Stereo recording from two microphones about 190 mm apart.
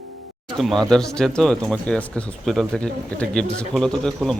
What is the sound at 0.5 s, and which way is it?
Speech, centre (ahead or behind).